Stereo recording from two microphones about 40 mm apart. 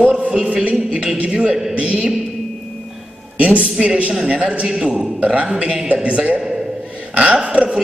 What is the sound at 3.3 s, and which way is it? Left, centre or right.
A man's voice, right.